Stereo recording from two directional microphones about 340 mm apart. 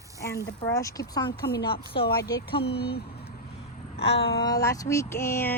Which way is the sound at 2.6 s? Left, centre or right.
Left.